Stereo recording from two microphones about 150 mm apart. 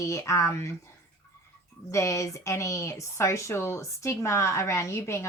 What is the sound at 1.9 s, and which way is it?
Speech, 20° left (ahead or behind).